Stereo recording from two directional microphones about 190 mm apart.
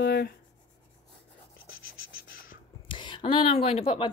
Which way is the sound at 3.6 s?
30° left (ahead or behind).